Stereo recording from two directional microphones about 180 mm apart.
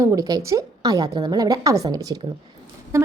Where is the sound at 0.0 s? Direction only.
20° right (ahead or behind).